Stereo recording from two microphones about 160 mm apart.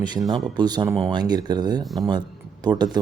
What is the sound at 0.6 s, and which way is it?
Speech, 25° right (ahead or behind).